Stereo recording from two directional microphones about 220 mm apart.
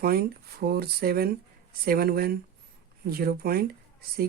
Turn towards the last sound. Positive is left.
turn(degrees=-45)  # may be behind; listen again after turning